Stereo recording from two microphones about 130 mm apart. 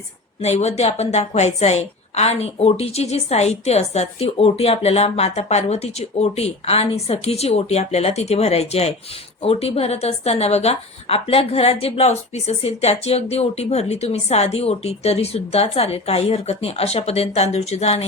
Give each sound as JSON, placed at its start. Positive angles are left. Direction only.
{"t": 0.4, "sound": "a woman's voice", "side_deg": 55}